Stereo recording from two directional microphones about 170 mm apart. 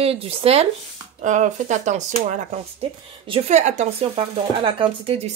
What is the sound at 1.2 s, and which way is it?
Speech, 45° right (ahead or behind).